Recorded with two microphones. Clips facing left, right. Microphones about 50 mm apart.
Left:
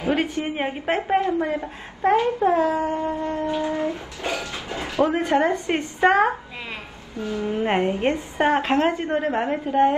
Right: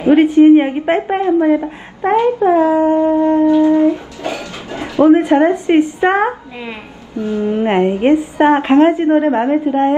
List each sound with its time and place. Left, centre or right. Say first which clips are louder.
0.1 s a woman's voice: right 18 dB; centre
7.2 s a woman's voice: right 8 dB; right
7.6 s a woman's voice: right 8 dB; centre